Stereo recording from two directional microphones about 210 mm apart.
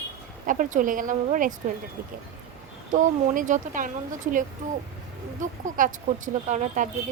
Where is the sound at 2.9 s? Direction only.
35° right (ahead or behind).